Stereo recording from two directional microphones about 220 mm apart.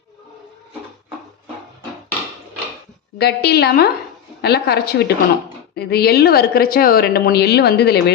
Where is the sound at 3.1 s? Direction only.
45° left (ahead or behind).